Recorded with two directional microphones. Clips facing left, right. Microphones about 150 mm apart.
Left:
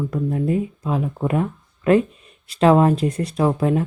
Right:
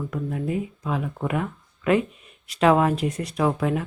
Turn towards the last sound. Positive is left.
turn(degrees=35)  # may be behind; listen again after turning